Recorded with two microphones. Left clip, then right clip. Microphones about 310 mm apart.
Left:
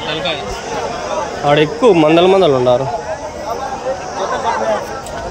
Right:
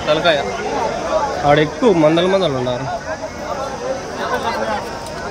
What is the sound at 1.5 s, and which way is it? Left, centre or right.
Speech, centre.